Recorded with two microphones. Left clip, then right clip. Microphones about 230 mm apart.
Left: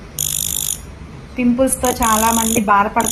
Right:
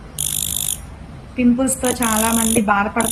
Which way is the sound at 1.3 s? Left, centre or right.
Centre.